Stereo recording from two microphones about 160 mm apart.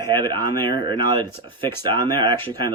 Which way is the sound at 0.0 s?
30° right (ahead or behind).